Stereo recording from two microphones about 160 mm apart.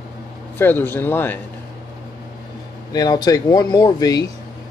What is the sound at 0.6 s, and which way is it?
Speech, 15° left (ahead or behind).